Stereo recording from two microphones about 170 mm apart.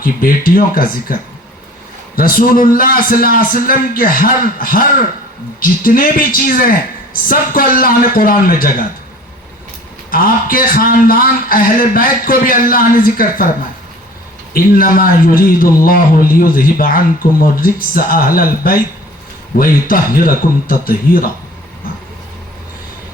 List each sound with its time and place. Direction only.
0.0 s speech: 55° left (ahead or behind)
10.1 s speech: 55° left (ahead or behind)
14.5 s speech: 55° left (ahead or behind)